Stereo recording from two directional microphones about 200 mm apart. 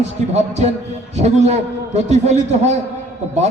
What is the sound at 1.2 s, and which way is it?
A man's voice, 35° right (ahead or behind).